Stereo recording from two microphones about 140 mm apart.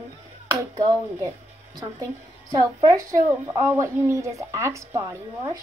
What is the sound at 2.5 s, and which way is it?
A woman's voice, 25° right (ahead or behind).